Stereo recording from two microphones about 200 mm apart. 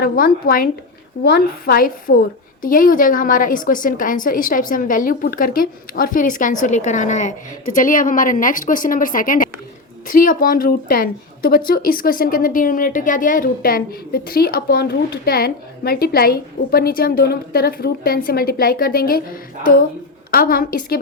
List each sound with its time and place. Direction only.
0.0 s a woman's voice: 45° left (ahead or behind)